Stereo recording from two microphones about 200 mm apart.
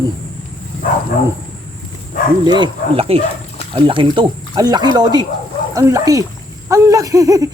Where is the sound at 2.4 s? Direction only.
20° right (ahead or behind).